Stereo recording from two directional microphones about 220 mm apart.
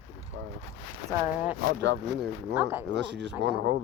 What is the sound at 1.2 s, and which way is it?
Speech, 5° right (ahead or behind).